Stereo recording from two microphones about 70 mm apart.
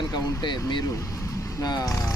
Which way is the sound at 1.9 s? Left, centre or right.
Left.